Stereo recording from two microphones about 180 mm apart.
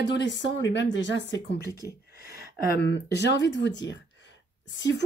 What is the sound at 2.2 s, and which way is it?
A woman's voice, 65° left (ahead or behind).